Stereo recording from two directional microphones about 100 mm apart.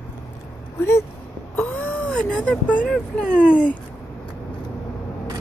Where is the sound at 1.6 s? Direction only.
15° left (ahead or behind).